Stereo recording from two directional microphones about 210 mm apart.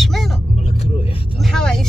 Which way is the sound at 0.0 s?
Centre (ahead or behind).